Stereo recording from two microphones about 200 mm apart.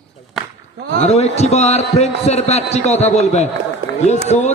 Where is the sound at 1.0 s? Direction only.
30° left (ahead or behind).